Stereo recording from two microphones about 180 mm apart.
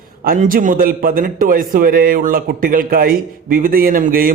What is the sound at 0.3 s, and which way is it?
A man's voice, 50° right (ahead or behind).